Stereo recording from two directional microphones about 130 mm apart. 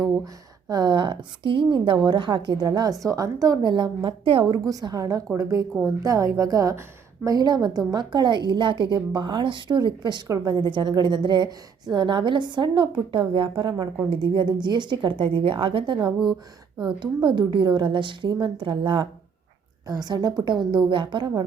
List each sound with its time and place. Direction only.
0.7 s a woman's voice: 35° right (ahead or behind)
4.4 s a woman's voice: 30° right (ahead or behind)